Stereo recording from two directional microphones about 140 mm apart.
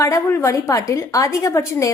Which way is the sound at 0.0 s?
20° left (ahead or behind).